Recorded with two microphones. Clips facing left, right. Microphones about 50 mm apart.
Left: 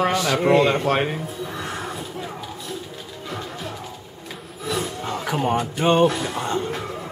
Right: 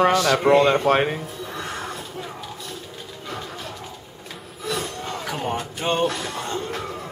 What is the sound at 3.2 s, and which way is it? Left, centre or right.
Music, centre.